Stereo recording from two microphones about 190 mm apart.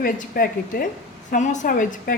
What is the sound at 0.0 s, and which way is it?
A woman's voice, 50° left (ahead or behind).